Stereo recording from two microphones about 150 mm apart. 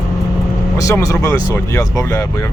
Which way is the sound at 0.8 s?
20° left (ahead or behind).